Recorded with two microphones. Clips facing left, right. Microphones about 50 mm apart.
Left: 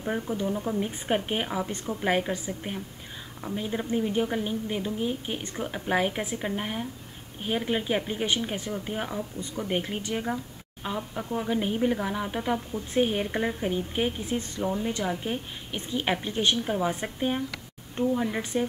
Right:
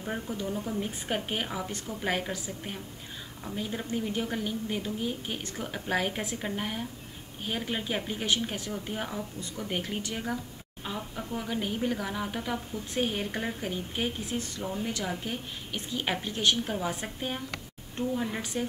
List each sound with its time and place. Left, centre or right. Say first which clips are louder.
0.0 s a woman's voice: left 5 dB; centre
3.4 s a woman's voice: left 4 dB; centre
11.1 s a woman's voice: left 5 dB; left
14.5 s a woman's voice: left 5 dB; left